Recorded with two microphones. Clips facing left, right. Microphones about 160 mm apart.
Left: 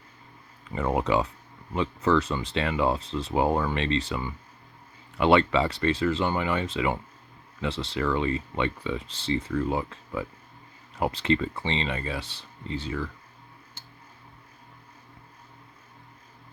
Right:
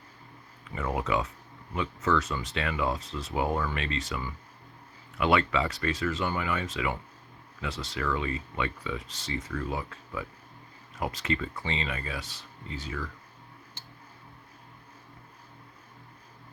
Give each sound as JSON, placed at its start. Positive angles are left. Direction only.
{"t": 0.8, "sound": "speech", "side_deg": 30}